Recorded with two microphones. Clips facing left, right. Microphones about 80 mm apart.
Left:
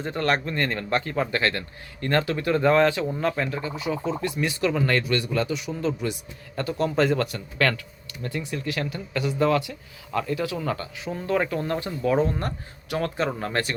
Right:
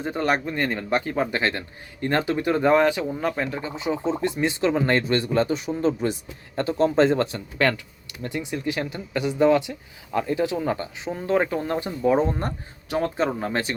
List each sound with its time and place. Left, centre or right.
0.0 s speech: centre